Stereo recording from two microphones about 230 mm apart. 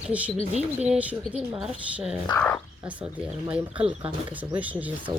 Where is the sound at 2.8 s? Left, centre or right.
Centre.